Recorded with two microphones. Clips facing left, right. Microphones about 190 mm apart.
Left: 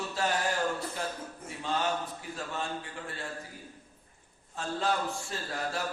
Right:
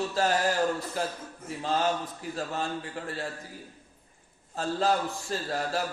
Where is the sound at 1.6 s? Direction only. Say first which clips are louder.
Right 4 dB; 35° right (ahead or behind).